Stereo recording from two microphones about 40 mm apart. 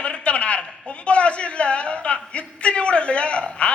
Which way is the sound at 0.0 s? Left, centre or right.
Left.